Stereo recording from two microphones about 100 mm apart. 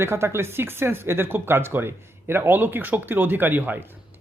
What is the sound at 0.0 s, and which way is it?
Speech, 25° right (ahead or behind).